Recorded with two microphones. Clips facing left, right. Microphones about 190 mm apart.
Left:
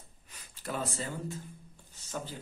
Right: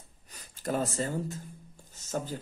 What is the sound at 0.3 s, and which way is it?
A man's voice, 40° right (ahead or behind).